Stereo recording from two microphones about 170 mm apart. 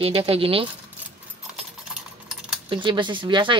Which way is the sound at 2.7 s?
30° right (ahead or behind).